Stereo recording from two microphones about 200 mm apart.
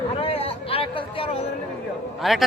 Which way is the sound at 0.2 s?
30° left (ahead or behind).